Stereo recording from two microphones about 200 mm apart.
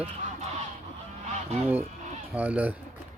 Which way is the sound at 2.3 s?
10° right (ahead or behind).